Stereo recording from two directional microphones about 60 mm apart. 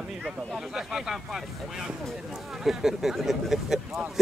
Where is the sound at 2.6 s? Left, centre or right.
Centre.